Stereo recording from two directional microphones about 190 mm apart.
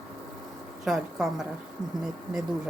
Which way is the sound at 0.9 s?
Centre (ahead or behind).